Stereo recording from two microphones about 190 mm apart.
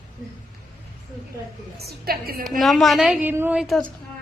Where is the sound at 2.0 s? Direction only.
50° right (ahead or behind).